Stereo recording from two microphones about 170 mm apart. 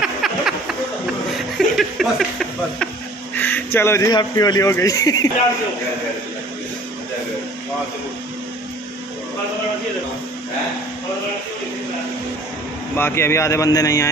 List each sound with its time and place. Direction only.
0.0 s a sound: 5° right (ahead or behind)
1.6 s speech: centre (ahead or behind)
3.3 s speech: 10° left (ahead or behind)
12.9 s speech: 15° left (ahead or behind)